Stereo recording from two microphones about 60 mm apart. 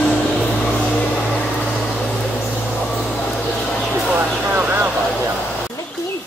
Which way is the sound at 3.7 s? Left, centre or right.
Centre.